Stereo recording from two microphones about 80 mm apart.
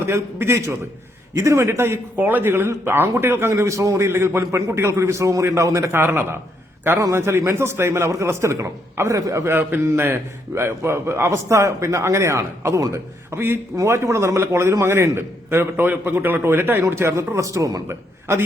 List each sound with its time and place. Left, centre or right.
0.0 s speech: right
5.9 s speech: right
9.5 s speech: right
17.8 s speech: right